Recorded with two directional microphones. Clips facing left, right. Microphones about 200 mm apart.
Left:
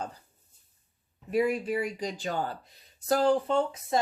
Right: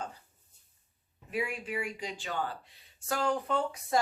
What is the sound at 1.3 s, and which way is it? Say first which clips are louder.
Speech: left 8 dB; 40° left (ahead or behind).